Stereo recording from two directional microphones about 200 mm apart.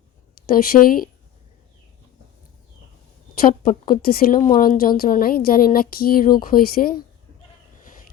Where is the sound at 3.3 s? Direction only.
45° left (ahead or behind).